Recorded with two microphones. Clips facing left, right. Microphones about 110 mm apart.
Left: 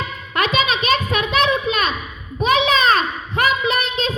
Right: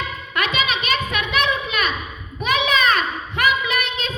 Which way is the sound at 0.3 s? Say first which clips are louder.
Left 4 dB; 35° left (ahead or behind).